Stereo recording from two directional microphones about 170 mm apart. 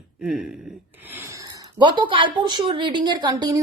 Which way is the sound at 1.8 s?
25° right (ahead or behind).